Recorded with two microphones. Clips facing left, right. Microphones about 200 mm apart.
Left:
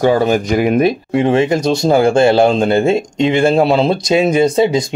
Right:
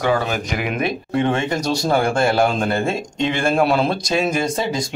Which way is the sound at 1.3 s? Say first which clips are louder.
Left 10 dB; 25° left (ahead or behind).